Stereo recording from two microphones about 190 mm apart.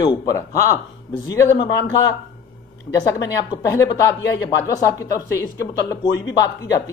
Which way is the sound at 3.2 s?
20° left (ahead or behind).